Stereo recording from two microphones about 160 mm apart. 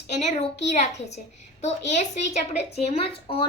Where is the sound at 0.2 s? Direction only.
45° left (ahead or behind).